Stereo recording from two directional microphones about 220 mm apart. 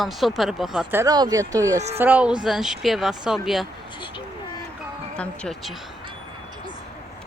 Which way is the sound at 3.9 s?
20° left (ahead or behind).